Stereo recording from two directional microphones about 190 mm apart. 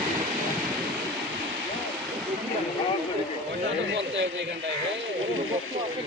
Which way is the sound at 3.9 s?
70° right (ahead or behind).